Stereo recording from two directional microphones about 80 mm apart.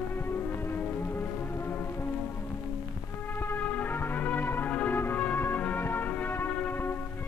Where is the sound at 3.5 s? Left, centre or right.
Left.